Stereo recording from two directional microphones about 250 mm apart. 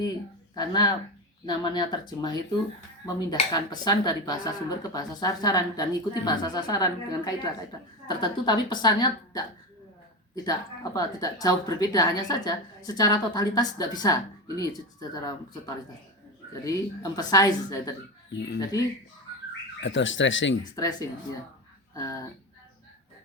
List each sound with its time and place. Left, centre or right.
0.5 s a woman's voice: centre
19.8 s speech: left
20.7 s a woman's voice: centre